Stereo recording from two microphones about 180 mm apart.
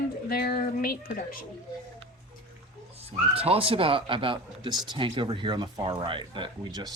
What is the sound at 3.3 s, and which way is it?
Speech, 30° right (ahead or behind).